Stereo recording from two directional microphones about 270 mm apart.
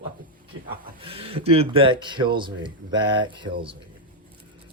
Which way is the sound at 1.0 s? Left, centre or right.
Right.